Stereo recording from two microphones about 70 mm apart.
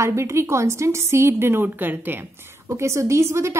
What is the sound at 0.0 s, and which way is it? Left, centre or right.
A woman's voice, right.